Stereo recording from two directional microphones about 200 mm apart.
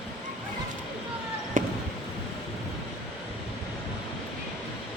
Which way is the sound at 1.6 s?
40° right (ahead or behind).